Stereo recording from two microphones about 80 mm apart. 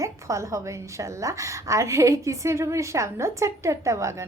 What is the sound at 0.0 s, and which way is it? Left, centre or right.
A woman's voice, right.